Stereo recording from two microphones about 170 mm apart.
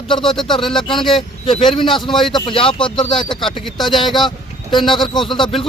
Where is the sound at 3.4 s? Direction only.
Centre (ahead or behind).